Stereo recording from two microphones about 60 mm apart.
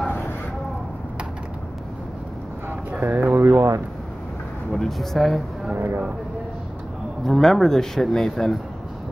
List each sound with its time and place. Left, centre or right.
2.9 s a sound: right
3.3 s speech: right
4.7 s speech: centre
5.8 s speech: right
7.2 s speech: centre